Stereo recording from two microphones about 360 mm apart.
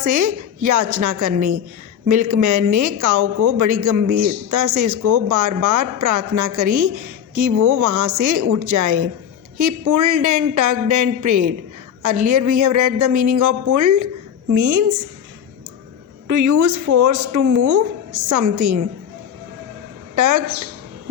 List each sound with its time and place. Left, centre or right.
0.0 s a woman's voice: right
16.2 s speech: right
20.1 s a woman's voice: right